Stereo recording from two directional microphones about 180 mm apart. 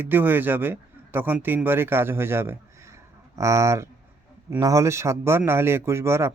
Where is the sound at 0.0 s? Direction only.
10° right (ahead or behind).